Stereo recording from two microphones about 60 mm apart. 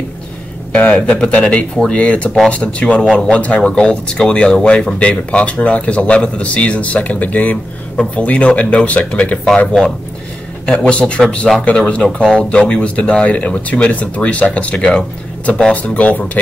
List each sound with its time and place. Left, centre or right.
0.7 s speech: left
10.6 s speech: centre
12.2 s speech: right
12.4 s speech: centre